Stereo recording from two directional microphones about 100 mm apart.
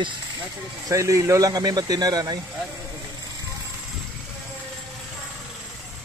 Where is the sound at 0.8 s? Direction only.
30° right (ahead or behind).